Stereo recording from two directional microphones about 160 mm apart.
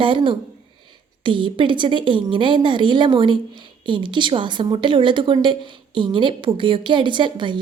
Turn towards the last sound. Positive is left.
turn(degrees=-30)  # may be behind; listen again after turning